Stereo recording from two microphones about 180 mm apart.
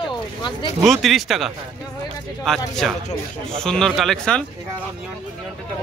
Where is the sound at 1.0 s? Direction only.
Centre (ahead or behind).